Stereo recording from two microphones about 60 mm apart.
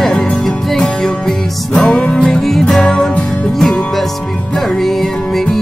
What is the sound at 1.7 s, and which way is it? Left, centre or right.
Music, centre.